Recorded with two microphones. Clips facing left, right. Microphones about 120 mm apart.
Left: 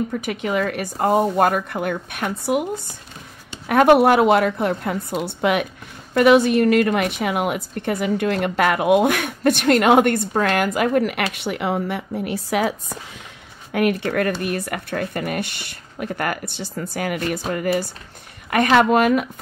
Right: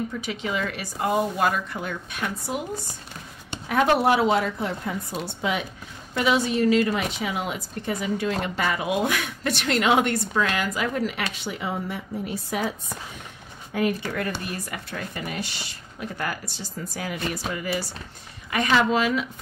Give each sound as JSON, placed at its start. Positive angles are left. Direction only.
{"t": 0.1, "sound": "a woman's voice", "side_deg": 55}
{"t": 13.7, "sound": "a woman's voice", "side_deg": 65}
{"t": 17.5, "sound": "a woman's voice", "side_deg": 50}